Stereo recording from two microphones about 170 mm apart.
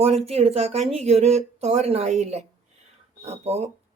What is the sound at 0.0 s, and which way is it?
Speech, 35° right (ahead or behind).